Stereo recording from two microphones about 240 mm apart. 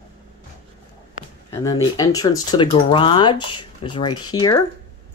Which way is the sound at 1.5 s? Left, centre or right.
Centre.